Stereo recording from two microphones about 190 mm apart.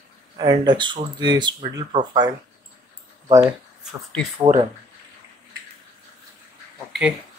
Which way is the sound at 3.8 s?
Centre (ahead or behind).